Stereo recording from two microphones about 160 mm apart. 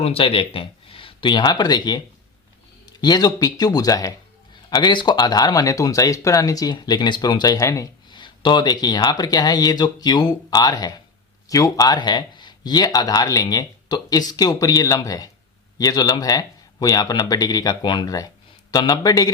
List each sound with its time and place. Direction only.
0.0 s speech: 35° left (ahead or behind)
3.0 s speech: 25° left (ahead or behind)